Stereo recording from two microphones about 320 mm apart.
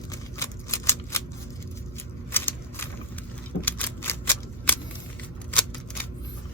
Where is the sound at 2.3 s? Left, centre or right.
Centre.